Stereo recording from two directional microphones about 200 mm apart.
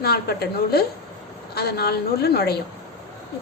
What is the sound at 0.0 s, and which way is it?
A woman's voice, 50° left (ahead or behind).